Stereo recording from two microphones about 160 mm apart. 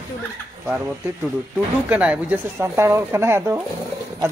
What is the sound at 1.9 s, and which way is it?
Speech, 10° right (ahead or behind).